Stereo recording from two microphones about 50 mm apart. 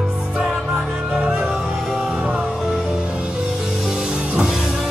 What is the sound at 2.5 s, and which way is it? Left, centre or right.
Music, centre.